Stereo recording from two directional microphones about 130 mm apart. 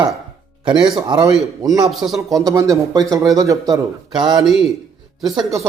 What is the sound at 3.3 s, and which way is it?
A man's voice, 25° right (ahead or behind).